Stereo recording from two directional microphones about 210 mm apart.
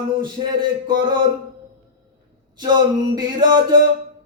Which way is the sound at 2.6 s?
20° right (ahead or behind).